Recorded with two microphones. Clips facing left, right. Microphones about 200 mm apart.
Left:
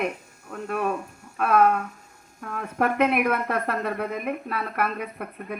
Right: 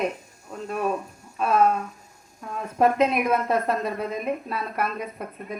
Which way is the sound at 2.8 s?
60° left (ahead or behind).